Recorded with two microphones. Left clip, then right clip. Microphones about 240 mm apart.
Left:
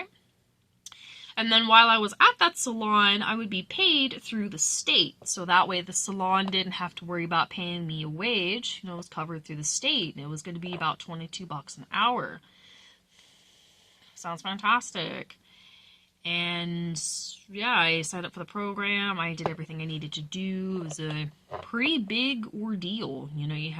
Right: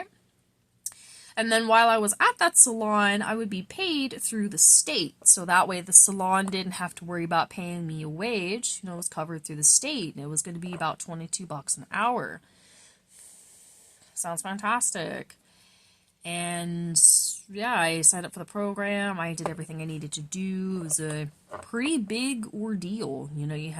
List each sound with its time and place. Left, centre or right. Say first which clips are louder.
1.4 s speech: left 2 dB; right
14.2 s speech: even; right